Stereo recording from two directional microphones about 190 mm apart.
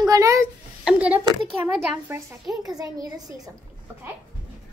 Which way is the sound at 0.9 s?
5° right (ahead or behind).